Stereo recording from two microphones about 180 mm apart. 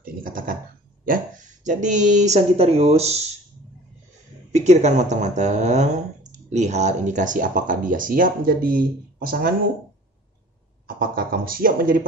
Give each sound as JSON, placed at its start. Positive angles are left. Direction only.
{"t": 0.0, "sound": "a sound", "side_deg": -50}
{"t": 1.0, "sound": "speech", "side_deg": -50}
{"t": 4.5, "sound": "speech", "side_deg": -40}
{"t": 11.0, "sound": "speech", "side_deg": -55}